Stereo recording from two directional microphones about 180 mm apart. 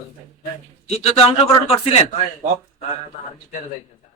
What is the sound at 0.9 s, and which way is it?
A man's voice, 35° left (ahead or behind).